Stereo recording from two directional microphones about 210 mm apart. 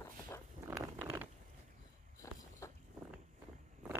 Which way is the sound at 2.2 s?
15° left (ahead or behind).